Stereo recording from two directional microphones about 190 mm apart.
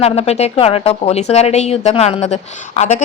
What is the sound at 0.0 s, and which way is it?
A woman's voice, 35° left (ahead or behind).